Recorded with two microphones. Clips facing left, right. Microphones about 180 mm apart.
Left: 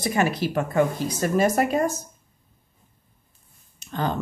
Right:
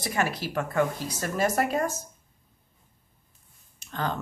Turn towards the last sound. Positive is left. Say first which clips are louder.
# left 4 dB
turn(degrees=15)  # may be behind; listen again after turning